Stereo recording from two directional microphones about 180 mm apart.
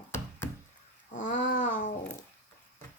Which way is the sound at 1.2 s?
45° left (ahead or behind).